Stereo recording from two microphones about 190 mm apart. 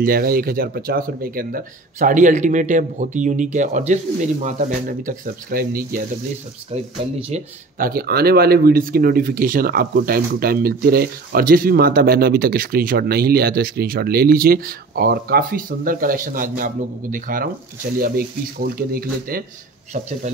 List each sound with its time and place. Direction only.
0.0 s speech: 50° right (ahead or behind)
7.8 s speech: 55° right (ahead or behind)
19.9 s speech: 35° right (ahead or behind)